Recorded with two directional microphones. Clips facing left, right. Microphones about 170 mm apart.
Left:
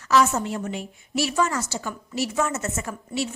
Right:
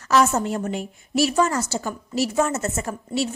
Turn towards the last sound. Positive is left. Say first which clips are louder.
# right 3 dB
turn(degrees=-35)  # may be behind; listen again after turning